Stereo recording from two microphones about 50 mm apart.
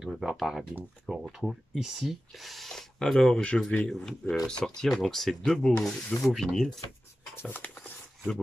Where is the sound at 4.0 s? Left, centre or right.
Centre.